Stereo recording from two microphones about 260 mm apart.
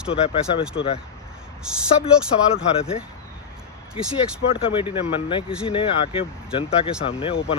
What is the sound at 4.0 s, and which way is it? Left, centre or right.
Speech, centre.